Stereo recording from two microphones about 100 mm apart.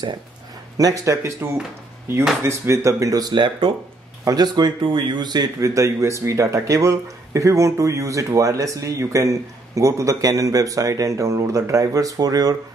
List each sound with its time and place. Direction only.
0.7 s speech: 35° right (ahead or behind); by 3.7 s 50° right (ahead or behind)
4.2 s speech: 40° right (ahead or behind)